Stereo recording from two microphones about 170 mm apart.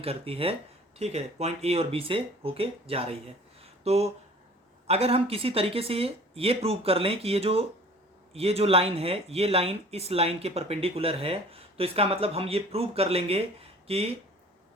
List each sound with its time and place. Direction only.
0.0 s speech: 35° right (ahead or behind)